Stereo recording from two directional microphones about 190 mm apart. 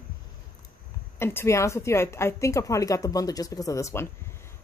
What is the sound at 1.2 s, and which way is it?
A woman's voice, 15° left (ahead or behind).